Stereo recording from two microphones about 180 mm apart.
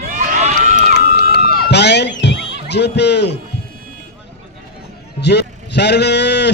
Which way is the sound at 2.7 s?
70° left (ahead or behind).